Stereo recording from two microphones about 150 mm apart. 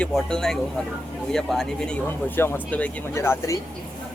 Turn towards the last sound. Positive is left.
turn(degrees=15)  # may be behind; listen again after turning